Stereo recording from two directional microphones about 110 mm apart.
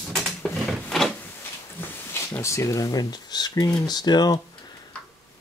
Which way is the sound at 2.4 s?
25° left (ahead or behind).